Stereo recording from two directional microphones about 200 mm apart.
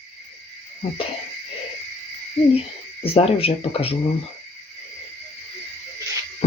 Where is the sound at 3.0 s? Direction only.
30° left (ahead or behind).